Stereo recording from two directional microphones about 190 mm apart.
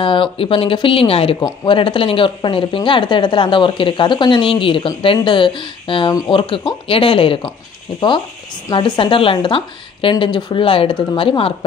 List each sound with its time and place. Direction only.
0.0 s speech: 25° left (ahead or behind)
8.6 s speech: 25° left (ahead or behind)